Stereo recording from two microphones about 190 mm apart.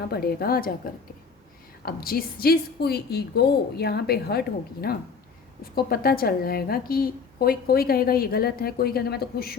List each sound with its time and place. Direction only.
0.1 s a woman's voice: 55° left (ahead or behind)